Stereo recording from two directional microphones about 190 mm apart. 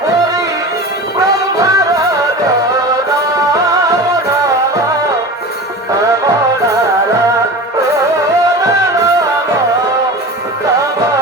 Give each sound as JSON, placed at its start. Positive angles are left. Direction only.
{"t": 1.5, "sound": "music", "side_deg": -15}
{"t": 3.5, "sound": "music", "side_deg": -15}